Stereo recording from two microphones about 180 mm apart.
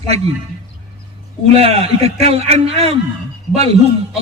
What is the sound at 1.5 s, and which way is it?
A man's voice, 35° right (ahead or behind).